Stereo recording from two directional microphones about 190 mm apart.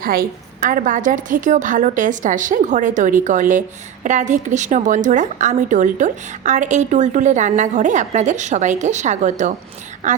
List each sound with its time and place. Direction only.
0.0 s a woman's voice: 50° right (ahead or behind)